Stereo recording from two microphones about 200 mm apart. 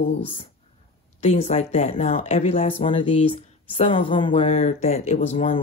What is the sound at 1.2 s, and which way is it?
Speech, 35° left (ahead or behind).